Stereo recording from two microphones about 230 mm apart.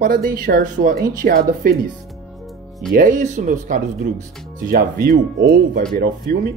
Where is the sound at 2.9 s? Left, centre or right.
Right.